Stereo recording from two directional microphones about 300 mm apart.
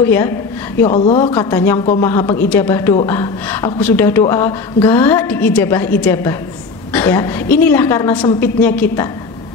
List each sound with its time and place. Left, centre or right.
0.0 s speech: centre
0.7 s speech: centre
1.2 s speech: centre